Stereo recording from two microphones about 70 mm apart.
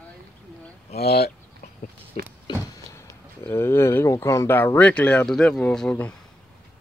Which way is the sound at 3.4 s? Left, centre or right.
Left.